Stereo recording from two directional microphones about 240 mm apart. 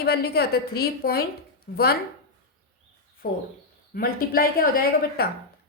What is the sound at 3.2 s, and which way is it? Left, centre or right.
A woman's voice, left.